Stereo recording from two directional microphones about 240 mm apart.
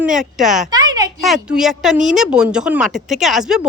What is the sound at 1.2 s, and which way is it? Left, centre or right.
A woman's voice, centre.